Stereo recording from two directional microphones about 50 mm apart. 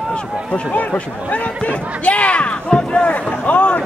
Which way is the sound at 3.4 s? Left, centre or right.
Left.